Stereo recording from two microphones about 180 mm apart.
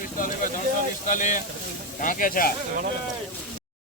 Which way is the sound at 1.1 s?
45° left (ahead or behind).